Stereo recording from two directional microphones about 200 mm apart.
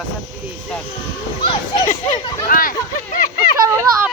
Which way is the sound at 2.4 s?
45° left (ahead or behind).